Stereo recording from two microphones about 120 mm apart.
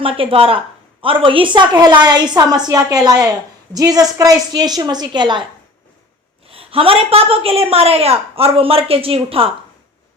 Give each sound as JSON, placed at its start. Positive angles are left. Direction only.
{"t": 0.0, "sound": "a woman's voice", "side_deg": -50}
{"t": 6.5, "sound": "a woman's voice", "side_deg": -50}